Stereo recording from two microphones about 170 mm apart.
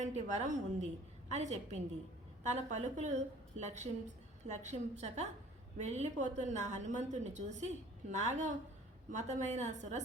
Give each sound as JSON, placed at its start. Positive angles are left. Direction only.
{"t": 0.0, "sound": "a woman's voice", "side_deg": -40}